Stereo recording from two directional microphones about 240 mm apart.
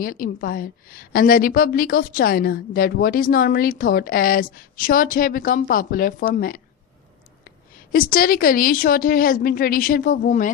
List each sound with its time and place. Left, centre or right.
0.0 s a woman's voice: left
7.9 s a woman's voice: left